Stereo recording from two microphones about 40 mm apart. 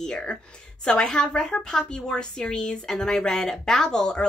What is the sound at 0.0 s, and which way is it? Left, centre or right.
A woman's voice, centre.